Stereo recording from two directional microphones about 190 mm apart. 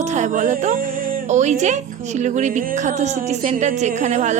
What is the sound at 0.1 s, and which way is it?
A woman's voice, 40° right (ahead or behind).